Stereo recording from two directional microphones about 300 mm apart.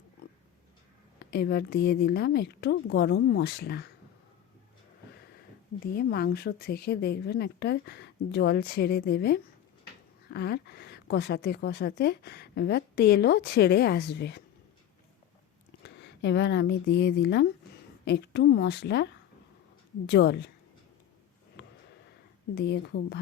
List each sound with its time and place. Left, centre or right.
1.2 s a woman's voice: left
5.8 s a woman's voice: left
15.8 s a woman's voice: left
20.1 s a woman's voice: left
21.6 s a sound: left
22.5 s a woman's voice: left